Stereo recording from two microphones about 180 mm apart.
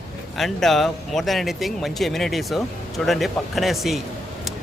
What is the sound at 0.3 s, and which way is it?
Speech, centre (ahead or behind).